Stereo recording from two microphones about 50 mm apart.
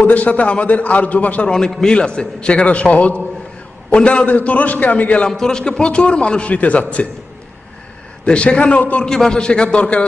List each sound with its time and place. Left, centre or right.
0.0 s a man's voice: left
1.5 s a man's voice: centre; by 5.3 s left
5.3 s a man's voice: centre
8.3 s a man's voice: left
9.0 s a man's voice: centre